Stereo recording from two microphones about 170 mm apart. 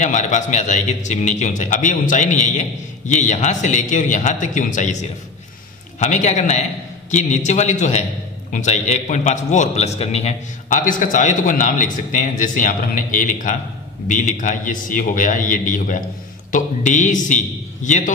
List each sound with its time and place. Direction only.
0.0 s a man's voice: 45° left (ahead or behind)